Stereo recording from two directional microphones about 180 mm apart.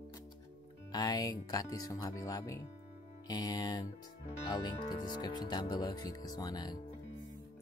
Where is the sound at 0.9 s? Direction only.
20° left (ahead or behind).